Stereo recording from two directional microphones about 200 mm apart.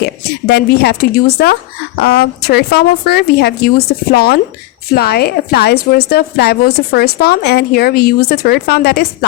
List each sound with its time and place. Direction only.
0.0 s a woman's voice: 55° left (ahead or behind)